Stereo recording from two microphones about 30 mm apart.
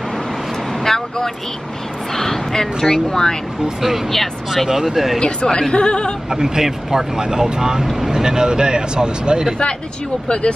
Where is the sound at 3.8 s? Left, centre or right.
Centre.